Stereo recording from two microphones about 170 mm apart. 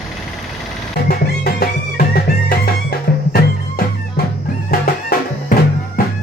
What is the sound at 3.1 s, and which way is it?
Music, 65° left (ahead or behind).